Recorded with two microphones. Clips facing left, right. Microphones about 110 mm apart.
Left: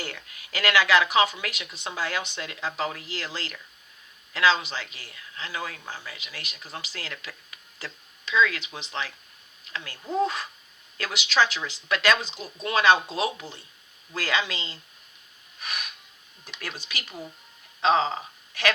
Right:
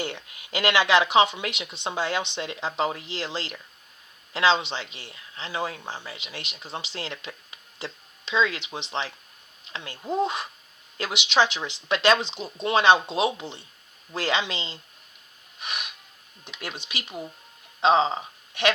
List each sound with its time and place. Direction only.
0.0 s speech: 25° right (ahead or behind)
15.6 s snort: 20° right (ahead or behind)
16.6 s speech: 20° right (ahead or behind)